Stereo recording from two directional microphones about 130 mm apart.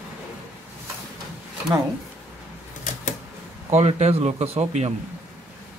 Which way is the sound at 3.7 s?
60° right (ahead or behind).